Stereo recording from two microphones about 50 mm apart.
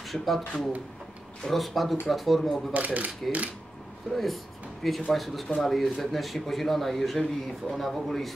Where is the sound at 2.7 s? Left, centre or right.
Right.